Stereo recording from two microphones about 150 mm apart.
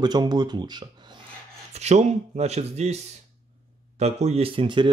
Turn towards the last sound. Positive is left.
turn(degrees=-30)  # may be behind; listen again after turning